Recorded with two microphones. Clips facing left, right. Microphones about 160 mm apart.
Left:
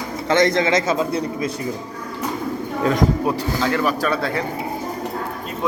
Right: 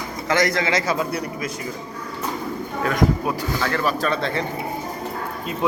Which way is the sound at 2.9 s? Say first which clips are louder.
Left 2 dB; 30° left (ahead or behind).